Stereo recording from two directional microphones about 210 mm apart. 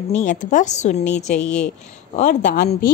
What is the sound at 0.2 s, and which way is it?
A woman's voice, 35° left (ahead or behind).